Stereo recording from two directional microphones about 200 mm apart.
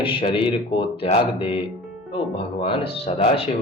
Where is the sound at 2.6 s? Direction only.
30° left (ahead or behind).